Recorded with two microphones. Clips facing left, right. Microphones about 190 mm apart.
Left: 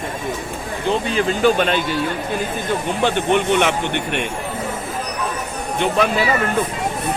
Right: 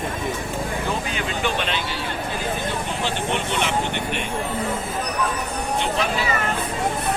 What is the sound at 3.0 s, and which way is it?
Speech, 55° left (ahead or behind).